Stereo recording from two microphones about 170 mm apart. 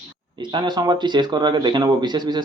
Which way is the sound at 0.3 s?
25° right (ahead or behind).